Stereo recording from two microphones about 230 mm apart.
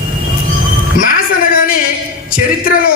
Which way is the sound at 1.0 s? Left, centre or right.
Left.